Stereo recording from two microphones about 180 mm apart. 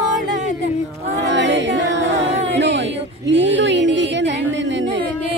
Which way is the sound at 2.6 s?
85° right.